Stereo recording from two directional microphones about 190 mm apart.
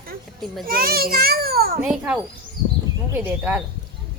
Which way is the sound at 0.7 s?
50° right (ahead or behind).